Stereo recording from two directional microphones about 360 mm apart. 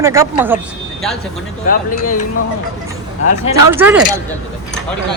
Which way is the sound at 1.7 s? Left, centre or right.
Left.